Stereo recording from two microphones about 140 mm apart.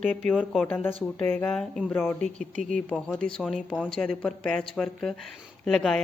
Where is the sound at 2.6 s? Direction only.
5° left (ahead or behind).